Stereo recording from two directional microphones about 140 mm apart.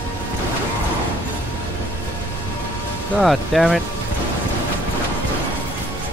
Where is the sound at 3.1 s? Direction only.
5° right (ahead or behind).